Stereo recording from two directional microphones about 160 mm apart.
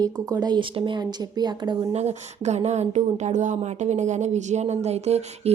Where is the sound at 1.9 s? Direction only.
45° right (ahead or behind).